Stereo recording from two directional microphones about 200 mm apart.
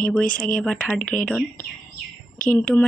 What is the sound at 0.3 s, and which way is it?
Speech, 45° left (ahead or behind).